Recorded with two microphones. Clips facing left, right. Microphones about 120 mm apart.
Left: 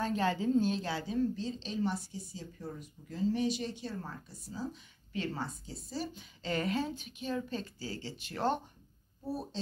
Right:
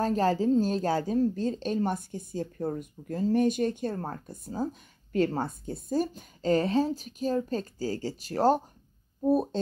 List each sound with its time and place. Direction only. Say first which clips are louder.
0.0 s a woman's voice: right 6 dB; 40° right (ahead or behind)
9.2 s a woman's voice: right 14 dB; 55° right (ahead or behind)